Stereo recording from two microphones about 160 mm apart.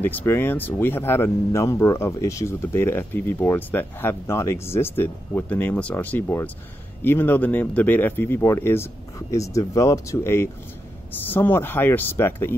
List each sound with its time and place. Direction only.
0.0 s speech: 15° left (ahead or behind)